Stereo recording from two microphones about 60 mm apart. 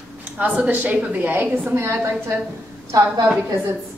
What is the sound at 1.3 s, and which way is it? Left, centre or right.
A woman's voice, right.